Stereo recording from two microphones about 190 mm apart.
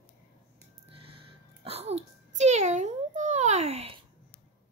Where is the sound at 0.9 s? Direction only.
30° right (ahead or behind).